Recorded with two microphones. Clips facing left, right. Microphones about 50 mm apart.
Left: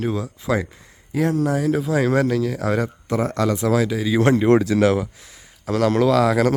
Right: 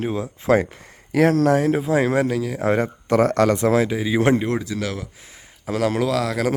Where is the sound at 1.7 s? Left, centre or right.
Right; by 2.6 s centre.